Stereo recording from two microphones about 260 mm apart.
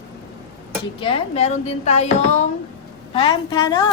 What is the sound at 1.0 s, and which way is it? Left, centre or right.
Speech, left.